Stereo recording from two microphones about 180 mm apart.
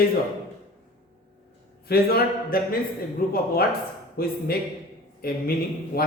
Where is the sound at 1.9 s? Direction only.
55° left (ahead or behind).